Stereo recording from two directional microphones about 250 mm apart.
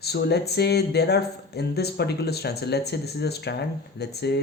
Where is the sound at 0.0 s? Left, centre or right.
Left.